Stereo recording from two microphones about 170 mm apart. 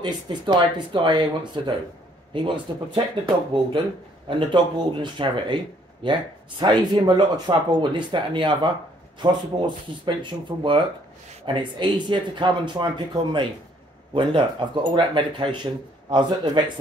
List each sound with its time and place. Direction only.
0.0 s speech: 25° right (ahead or behind)